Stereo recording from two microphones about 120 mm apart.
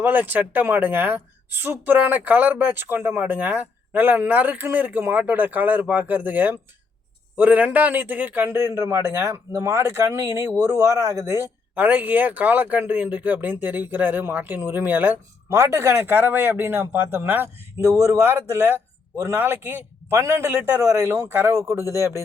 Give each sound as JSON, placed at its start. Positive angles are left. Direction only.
{"t": 0.0, "sound": "a man's voice", "side_deg": -15}